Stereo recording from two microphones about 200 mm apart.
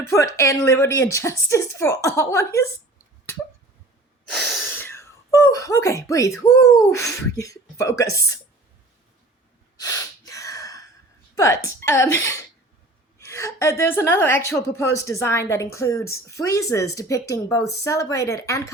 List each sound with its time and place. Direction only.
0.0 s a woman's voice: 15° left (ahead or behind)
4.3 s sneeze: centre (ahead or behind)
4.7 s a sound: 10° left (ahead or behind)
6.4 s a woman's voice: 15° left (ahead or behind)
9.8 s gasp: 15° left (ahead or behind)
11.3 s a woman's voice: 15° left (ahead or behind)